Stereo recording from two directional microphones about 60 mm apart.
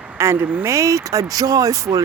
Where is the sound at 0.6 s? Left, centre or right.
Right.